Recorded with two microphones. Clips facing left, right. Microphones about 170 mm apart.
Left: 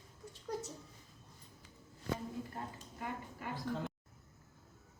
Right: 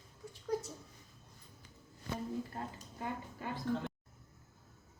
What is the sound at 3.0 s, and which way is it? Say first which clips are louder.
Speech: right 2 dB; 25° right (ahead or behind).